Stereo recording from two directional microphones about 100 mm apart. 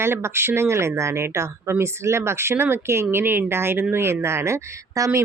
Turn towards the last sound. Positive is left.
turn(degrees=-30)  # may be behind; listen again after turning